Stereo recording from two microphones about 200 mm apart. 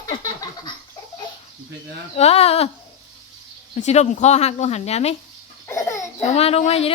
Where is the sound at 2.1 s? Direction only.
30° left (ahead or behind).